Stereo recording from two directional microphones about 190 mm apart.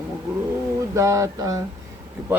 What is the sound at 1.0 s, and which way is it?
Speech, 15° right (ahead or behind).